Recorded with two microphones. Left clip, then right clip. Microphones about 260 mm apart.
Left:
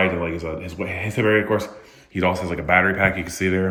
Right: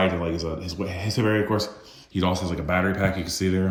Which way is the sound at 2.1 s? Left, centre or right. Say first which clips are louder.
Left 4 dB; right.